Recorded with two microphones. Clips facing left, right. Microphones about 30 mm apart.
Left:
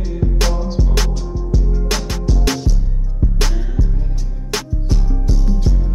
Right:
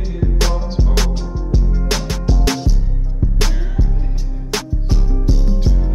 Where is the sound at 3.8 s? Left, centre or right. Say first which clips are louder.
Even; right.